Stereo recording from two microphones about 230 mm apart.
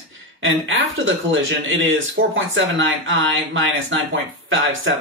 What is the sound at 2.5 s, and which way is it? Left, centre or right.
Speech, right.